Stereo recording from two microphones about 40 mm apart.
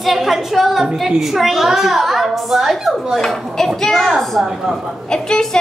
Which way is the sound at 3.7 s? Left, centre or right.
Centre.